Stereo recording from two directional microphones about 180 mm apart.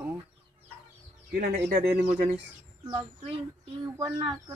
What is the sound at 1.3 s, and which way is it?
Speech, 60° right (ahead or behind).